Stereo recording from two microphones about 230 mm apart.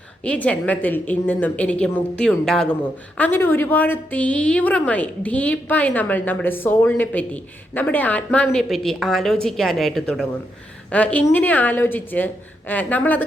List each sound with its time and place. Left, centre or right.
0.3 s a woman's voice: centre